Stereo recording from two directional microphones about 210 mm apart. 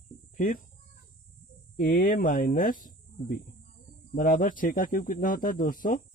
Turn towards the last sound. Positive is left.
turn(degrees=40)  # may be behind; listen again after turning